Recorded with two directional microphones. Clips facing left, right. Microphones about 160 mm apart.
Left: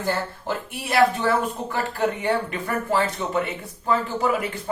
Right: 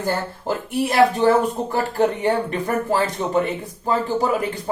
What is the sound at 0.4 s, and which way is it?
A man's voice, 35° right (ahead or behind).